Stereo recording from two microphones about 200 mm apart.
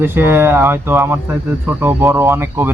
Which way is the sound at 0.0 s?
10° right (ahead or behind).